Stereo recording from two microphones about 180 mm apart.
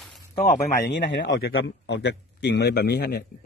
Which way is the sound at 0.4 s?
60° left (ahead or behind).